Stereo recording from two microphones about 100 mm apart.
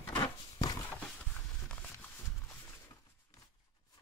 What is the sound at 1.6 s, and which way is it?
Clip-clop, 15° left (ahead or behind).